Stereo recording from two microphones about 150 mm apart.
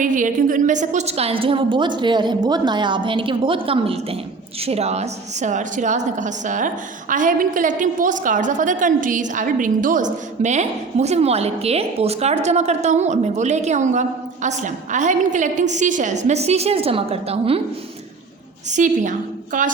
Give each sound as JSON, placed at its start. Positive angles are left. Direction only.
{"t": 0.0, "sound": "a woman's voice", "side_deg": -60}
{"t": 18.7, "sound": "a woman's voice", "side_deg": -55}